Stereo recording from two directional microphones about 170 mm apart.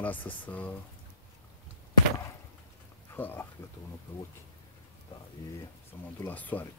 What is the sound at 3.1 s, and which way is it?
Speech, 10° left (ahead or behind).